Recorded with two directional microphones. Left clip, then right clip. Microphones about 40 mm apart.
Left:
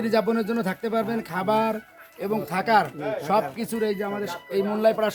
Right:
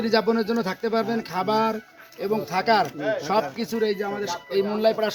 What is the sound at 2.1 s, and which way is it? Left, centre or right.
Speech, left.